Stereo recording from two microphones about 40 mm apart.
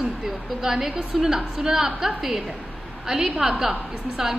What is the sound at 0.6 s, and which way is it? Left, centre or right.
A woman's voice, centre.